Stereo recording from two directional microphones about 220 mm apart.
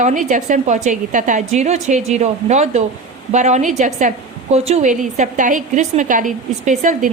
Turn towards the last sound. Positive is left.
turn(degrees=-35)  # may be behind; listen again after turning